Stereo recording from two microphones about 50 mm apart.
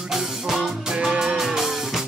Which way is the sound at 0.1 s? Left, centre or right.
Centre.